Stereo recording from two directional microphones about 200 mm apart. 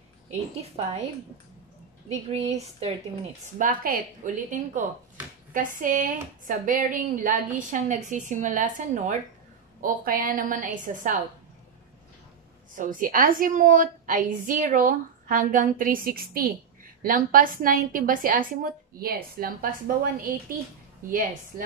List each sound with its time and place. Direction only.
0.6 s speech: 30° right (ahead or behind)
2.2 s speech: 30° right (ahead or behind)
3.5 s a woman's voice: 45° right (ahead or behind)
12.7 s a woman's voice: 40° right (ahead or behind)